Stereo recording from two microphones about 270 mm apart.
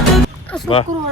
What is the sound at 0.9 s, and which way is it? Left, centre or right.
Speech, right.